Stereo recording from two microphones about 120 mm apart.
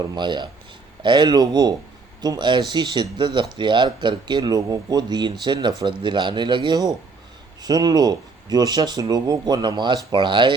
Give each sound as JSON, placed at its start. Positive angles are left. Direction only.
{"t": 0.0, "sound": "speech", "side_deg": -35}